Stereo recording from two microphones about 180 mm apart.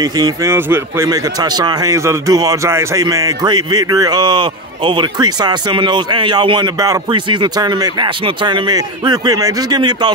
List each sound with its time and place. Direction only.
0.0 s a man's voice: 20° right (ahead or behind)